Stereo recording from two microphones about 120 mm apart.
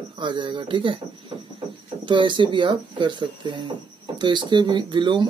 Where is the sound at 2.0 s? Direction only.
40° right (ahead or behind).